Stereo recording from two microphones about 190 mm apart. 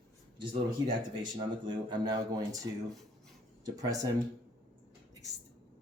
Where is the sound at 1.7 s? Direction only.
25° right (ahead or behind).